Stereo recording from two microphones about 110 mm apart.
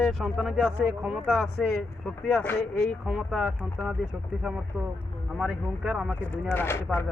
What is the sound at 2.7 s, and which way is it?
Speech, 5° left (ahead or behind).